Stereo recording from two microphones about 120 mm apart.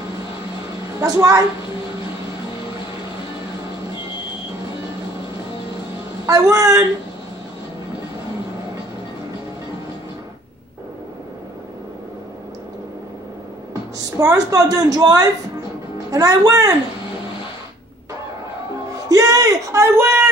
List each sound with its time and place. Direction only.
0.9 s speech: 30° right (ahead or behind)
6.2 s speech: 25° right (ahead or behind)
13.9 s a woman's voice: 30° right (ahead or behind)
19.0 s a sound: 30° right (ahead or behind)